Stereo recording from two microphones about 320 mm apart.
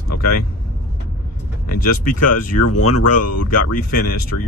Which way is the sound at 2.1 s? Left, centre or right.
Left.